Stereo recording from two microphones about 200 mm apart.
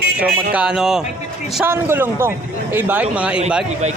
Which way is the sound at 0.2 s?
50° right (ahead or behind).